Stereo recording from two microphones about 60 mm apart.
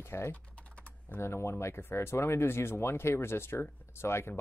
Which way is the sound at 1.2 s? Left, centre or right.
Left.